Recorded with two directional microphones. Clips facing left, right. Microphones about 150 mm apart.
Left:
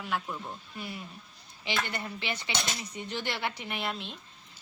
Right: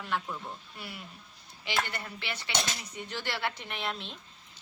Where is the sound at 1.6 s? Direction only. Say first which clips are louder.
Even; 20° left (ahead or behind).